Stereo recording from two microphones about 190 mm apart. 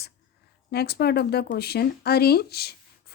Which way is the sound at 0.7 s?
60° left (ahead or behind).